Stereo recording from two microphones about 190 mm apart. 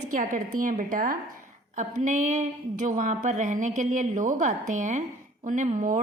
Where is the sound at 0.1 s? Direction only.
45° right (ahead or behind).